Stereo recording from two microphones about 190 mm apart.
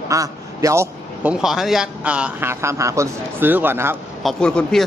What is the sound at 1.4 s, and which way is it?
Speech, centre (ahead or behind).